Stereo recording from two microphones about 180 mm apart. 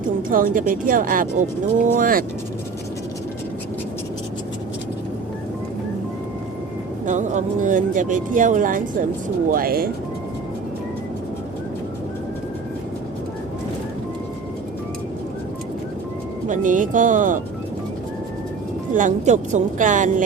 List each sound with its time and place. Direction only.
0.2 s speech: 50° right (ahead or behind)
7.0 s speech: 45° right (ahead or behind)
16.5 s speech: 45° right (ahead or behind)
18.9 s speech: 45° right (ahead or behind)